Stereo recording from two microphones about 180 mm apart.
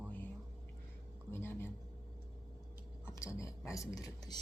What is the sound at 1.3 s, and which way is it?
Speech, 10° left (ahead or behind).